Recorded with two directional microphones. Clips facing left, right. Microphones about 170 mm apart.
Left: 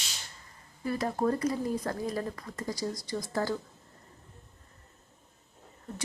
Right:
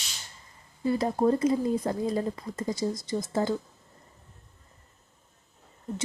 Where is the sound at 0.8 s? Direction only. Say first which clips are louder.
Right 5 dB; 25° right (ahead or behind).